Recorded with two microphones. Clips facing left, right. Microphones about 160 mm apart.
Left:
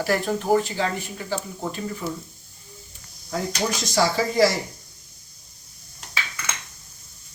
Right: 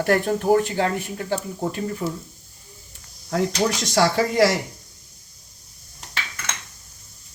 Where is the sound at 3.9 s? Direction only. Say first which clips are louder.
Right 1 dB; 70° right (ahead or behind).